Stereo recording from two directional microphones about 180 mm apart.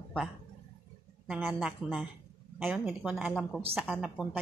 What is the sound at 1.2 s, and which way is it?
A woman's voice, 5° right (ahead or behind).